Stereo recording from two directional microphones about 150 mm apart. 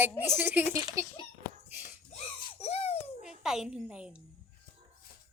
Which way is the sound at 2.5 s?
40° left (ahead or behind).